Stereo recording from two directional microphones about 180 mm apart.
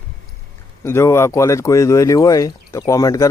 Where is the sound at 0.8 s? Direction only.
15° left (ahead or behind).